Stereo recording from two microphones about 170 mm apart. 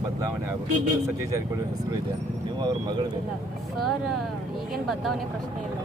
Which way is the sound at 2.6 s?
25° right (ahead or behind).